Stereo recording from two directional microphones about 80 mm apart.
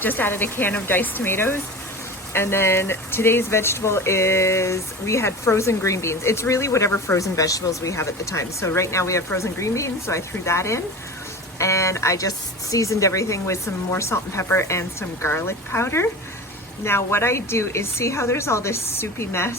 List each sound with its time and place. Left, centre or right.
0.0 s speech: left